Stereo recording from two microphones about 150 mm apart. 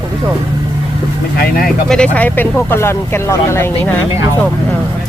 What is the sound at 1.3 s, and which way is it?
Speech, 80° left.